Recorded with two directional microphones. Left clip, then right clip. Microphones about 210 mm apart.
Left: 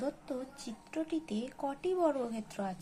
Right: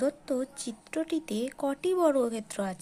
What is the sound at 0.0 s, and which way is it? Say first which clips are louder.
A woman's voice: right 9 dB; 40° right (ahead or behind).